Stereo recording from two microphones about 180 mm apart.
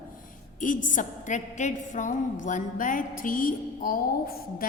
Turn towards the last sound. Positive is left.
turn(degrees=55)  # may be behind; listen again after turning